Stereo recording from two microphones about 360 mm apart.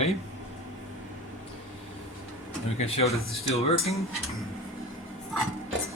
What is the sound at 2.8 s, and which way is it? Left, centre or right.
Speech, centre.